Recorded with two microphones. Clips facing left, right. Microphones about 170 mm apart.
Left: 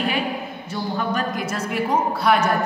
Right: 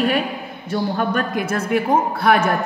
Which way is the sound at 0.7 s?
55° right (ahead or behind).